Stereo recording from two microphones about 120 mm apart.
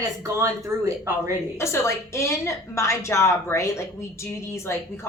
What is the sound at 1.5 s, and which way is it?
A woman's voice, 20° left (ahead or behind).